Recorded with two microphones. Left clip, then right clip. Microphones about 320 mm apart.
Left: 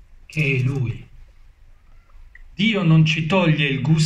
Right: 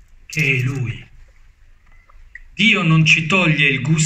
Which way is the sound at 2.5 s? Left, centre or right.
Left.